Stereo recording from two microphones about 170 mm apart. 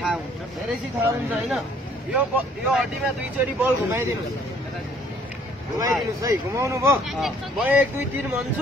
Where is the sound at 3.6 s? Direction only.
10° right (ahead or behind).